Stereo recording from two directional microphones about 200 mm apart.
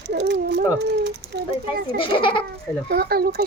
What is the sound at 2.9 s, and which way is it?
Speech, 50° right (ahead or behind).